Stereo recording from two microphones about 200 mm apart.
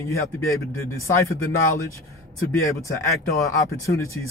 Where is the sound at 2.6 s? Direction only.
15° left (ahead or behind).